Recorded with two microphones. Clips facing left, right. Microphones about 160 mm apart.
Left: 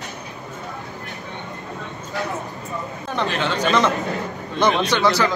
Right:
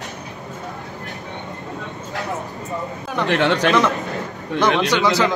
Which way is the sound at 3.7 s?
Centre (ahead or behind).